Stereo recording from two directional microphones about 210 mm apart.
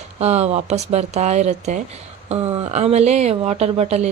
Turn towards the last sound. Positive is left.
turn(degrees=-30)  # may be behind; listen again after turning